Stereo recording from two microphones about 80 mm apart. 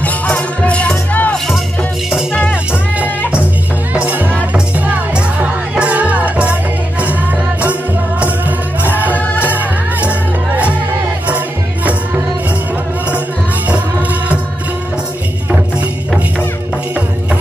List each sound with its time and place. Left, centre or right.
0.0 s music: centre
3.9 s music: centre
8.2 s music: right
9.1 s music: left
9.6 s music: centre
11.2 s music: centre